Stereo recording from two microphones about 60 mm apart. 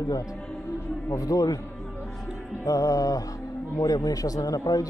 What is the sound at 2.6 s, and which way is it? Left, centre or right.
A man's voice, left.